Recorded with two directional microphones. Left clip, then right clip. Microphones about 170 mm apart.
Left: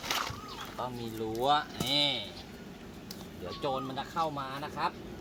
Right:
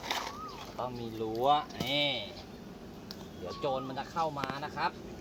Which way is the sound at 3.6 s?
10° left (ahead or behind).